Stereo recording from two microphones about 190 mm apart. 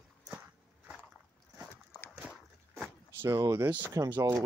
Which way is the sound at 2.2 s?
5° left (ahead or behind).